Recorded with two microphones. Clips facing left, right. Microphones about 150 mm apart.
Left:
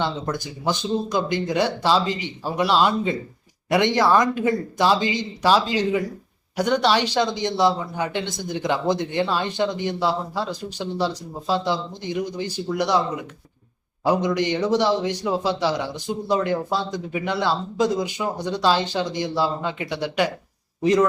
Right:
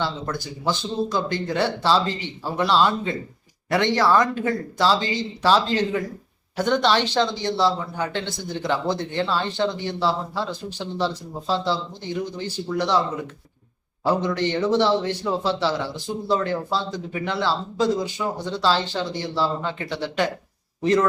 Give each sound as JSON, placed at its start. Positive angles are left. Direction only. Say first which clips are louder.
{"t": 0.0, "sound": "speech", "louder": "left 2 dB", "side_deg": 20}
{"t": 14.0, "sound": "speech", "louder": "left 1 dB", "side_deg": 15}